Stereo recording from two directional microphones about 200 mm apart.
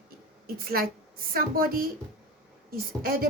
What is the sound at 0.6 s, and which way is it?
A woman's voice, 50° right (ahead or behind).